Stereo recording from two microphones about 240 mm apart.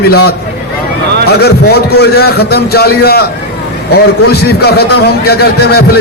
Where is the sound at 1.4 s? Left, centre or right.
Left.